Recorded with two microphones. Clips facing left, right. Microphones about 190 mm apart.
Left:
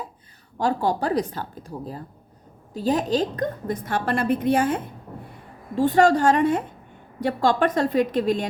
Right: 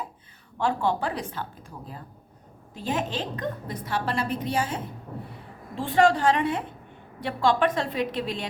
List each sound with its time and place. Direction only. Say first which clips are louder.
0.6 s a woman's voice: left 3 dB; 40° left (ahead or behind); by 4.8 s 55° left (ahead or behind)
5.7 s a woman's voice: left 4 dB; 45° left (ahead or behind)